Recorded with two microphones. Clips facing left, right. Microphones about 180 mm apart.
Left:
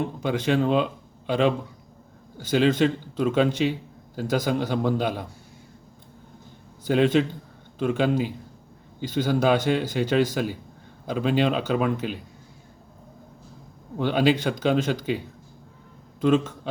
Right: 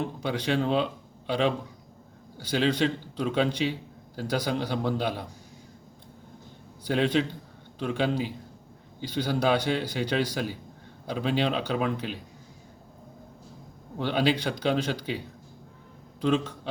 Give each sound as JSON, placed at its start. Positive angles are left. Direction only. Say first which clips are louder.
{"t": 0.0, "sound": "a man's voice", "louder": "left 4 dB", "side_deg": 50}
{"t": 6.8, "sound": "a man's voice", "louder": "left 5 dB", "side_deg": 50}
{"t": 14.0, "sound": "a man's voice", "louder": "left 4 dB", "side_deg": 45}
{"t": 16.2, "sound": "a man's voice", "louder": "left 5 dB", "side_deg": 50}